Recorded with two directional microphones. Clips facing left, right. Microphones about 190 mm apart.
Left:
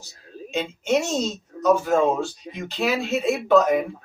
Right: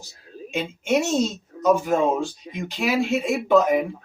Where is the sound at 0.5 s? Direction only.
10° right (ahead or behind).